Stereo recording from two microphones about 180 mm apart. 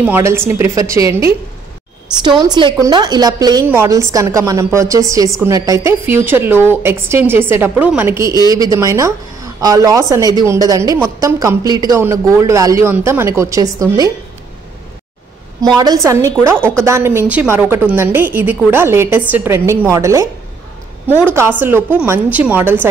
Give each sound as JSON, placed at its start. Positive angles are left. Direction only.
{"t": 0.0, "sound": "a woman's voice", "side_deg": -10}
{"t": 15.6, "sound": "a woman's voice", "side_deg": -20}